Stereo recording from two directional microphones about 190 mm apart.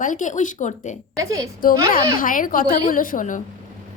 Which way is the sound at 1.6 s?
45° left (ahead or behind).